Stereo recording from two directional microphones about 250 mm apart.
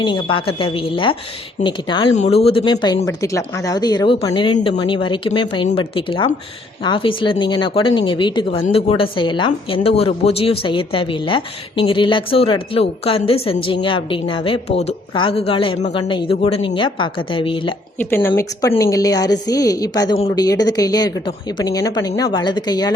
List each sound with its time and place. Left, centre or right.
0.0 s a woman's voice: centre
18.0 s a woman's voice: centre